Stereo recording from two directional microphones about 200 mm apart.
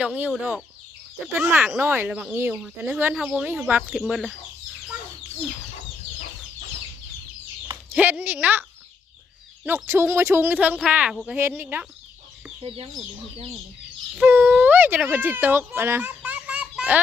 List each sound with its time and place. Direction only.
0.0 s speech: 5° right (ahead or behind)
1.3 s speech: 10° right (ahead or behind)
7.9 s speech: 10° right (ahead or behind)
9.6 s speech: 10° right (ahead or behind)
12.6 s speech: 30° right (ahead or behind)
14.2 s speech: 10° right (ahead or behind)